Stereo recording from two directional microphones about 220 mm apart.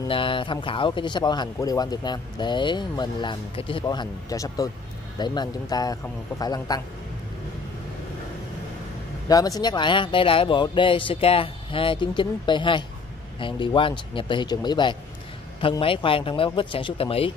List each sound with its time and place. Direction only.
0.0 s speech: 25° left (ahead or behind)
9.3 s speech: 15° left (ahead or behind)